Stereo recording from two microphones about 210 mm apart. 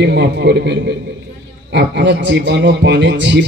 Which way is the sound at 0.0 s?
55° right (ahead or behind).